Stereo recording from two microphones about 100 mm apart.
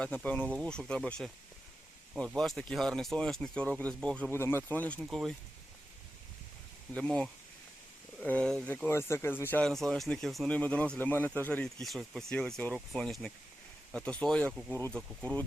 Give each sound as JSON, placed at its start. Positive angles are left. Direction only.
{"t": 0.0, "sound": "speech", "side_deg": 15}
{"t": 4.3, "sound": "speech", "side_deg": 25}
{"t": 5.1, "sound": "speech", "side_deg": 5}
{"t": 6.9, "sound": "speech", "side_deg": 10}
{"t": 8.9, "sound": "speech", "side_deg": 25}
{"t": 9.6, "sound": "speech", "side_deg": 5}
{"t": 10.5, "sound": "speech", "side_deg": 15}
{"t": 11.6, "sound": "speech", "side_deg": 0}